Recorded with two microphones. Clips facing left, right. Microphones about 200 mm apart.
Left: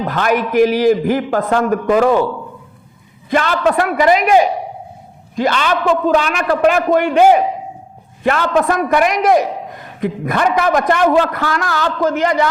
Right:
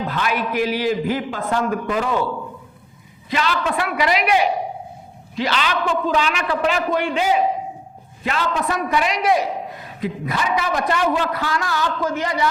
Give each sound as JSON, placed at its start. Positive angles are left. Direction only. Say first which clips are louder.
{"t": 0.1, "sound": "a man's voice", "louder": "left 10 dB", "side_deg": 45}
{"t": 3.2, "sound": "a man's voice", "louder": "left 7 dB", "side_deg": 50}